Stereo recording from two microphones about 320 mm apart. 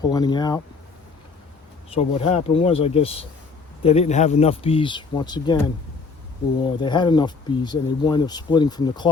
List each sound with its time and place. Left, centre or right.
0.0 s speech: centre
1.9 s speech: centre
6.7 s speech: centre